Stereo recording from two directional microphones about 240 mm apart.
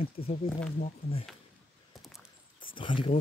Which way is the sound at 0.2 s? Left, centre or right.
Left.